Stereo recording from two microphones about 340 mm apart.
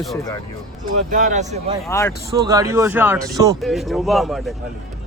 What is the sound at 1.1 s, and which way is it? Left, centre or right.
Speech, right.